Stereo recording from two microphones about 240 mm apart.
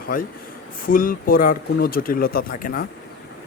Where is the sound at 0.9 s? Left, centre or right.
Left.